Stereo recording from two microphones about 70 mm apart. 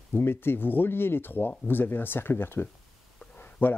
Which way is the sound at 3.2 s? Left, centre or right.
Left.